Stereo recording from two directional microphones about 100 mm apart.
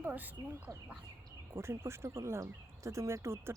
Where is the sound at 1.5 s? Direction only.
25° right (ahead or behind).